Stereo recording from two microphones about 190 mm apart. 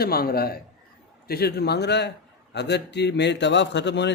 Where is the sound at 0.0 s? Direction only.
55° left (ahead or behind).